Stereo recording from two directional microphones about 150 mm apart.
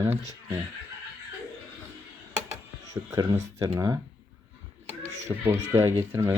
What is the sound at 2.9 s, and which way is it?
Speech, 25° right (ahead or behind).